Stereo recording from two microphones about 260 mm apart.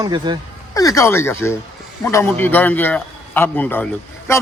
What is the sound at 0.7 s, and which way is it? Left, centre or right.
A man's voice, centre.